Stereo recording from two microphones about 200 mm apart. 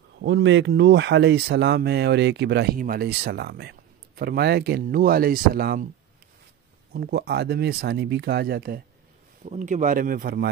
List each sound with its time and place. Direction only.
0.2 s speech: 65° right (ahead or behind); by 5.9 s 50° right (ahead or behind)
6.9 s speech: 55° right (ahead or behind)
9.4 s speech: 40° right (ahead or behind)